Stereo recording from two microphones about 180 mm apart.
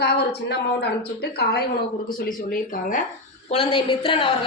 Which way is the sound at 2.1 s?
50° left (ahead or behind).